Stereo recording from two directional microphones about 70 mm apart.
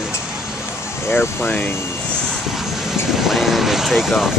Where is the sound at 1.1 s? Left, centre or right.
Left.